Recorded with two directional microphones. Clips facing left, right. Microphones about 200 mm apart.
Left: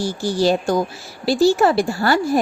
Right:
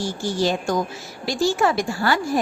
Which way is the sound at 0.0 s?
35° left (ahead or behind).